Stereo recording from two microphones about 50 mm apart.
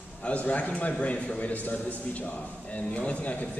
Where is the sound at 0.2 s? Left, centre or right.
Left.